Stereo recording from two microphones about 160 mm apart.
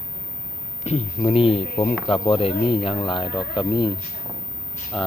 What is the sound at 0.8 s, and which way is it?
Speech, 40° left (ahead or behind).